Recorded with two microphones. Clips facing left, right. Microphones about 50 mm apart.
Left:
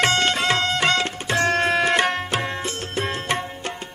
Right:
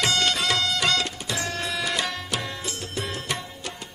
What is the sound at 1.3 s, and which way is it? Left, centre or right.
Music, left.